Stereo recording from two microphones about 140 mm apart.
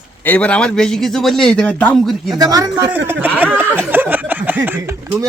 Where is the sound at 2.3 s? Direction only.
25° right (ahead or behind).